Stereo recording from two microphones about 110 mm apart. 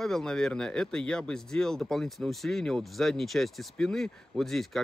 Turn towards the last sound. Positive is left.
turn(degrees=5)  # may be behind; listen again after turning